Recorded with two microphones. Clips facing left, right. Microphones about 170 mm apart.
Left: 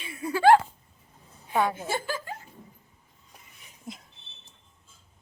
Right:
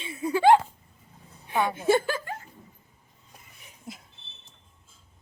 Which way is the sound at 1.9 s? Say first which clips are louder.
Right 8 dB; 60° right (ahead or behind).